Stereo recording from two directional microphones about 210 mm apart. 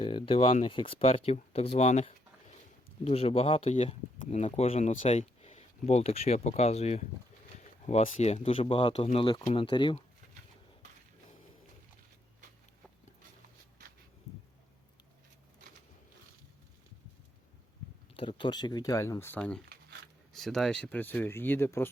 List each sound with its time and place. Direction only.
0.0 s speech: 25° left (ahead or behind)
18.2 s speech: 25° left (ahead or behind)